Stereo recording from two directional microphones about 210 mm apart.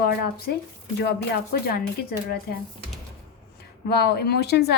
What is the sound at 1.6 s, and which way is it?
Speech, 45° left (ahead or behind).